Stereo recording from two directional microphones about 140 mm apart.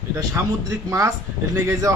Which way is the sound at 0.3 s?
20° right (ahead or behind).